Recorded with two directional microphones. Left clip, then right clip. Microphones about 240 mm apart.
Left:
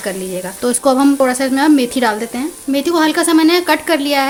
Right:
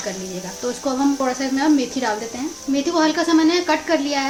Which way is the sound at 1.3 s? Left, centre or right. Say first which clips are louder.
Left 6 dB; left.